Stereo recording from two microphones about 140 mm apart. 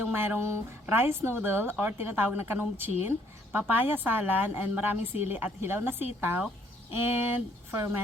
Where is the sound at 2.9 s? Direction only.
50° left (ahead or behind).